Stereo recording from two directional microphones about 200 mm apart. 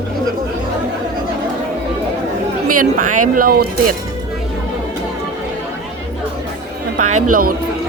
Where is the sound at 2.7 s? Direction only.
40° right (ahead or behind).